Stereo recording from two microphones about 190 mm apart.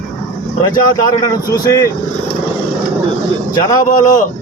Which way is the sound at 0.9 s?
15° left (ahead or behind).